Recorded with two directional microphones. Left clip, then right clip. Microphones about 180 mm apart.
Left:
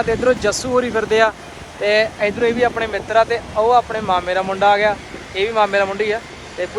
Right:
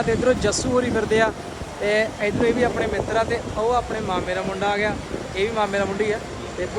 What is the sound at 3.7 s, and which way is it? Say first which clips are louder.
Speech: left 8 dB; 5° right (ahead or behind).